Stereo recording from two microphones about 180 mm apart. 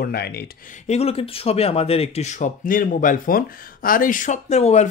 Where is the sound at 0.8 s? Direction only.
35° left (ahead or behind).